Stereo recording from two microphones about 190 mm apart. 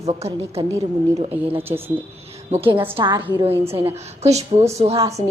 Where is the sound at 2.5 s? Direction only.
30° right (ahead or behind).